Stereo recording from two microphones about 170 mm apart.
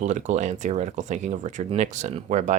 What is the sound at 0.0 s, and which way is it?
Speech, 45° right (ahead or behind).